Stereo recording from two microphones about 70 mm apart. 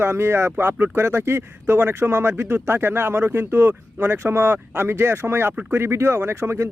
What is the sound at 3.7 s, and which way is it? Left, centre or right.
Speech, right.